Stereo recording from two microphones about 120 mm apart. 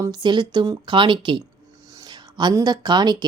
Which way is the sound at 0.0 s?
35° right (ahead or behind).